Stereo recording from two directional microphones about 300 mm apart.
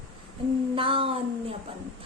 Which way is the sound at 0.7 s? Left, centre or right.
Centre.